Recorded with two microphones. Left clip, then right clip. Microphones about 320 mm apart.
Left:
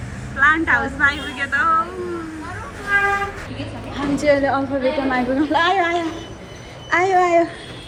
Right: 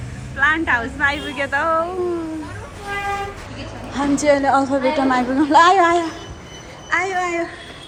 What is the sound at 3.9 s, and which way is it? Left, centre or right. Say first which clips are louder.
A woman's voice: right 1 dB; centre.